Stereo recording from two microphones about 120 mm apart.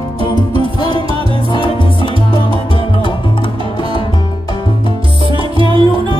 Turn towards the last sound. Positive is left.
turn(degrees=-45)  # may be behind; listen again after turning